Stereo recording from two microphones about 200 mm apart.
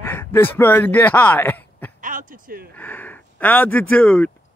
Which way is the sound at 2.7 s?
10° left (ahead or behind).